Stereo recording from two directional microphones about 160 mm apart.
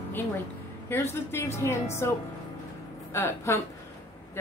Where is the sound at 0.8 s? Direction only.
15° left (ahead or behind).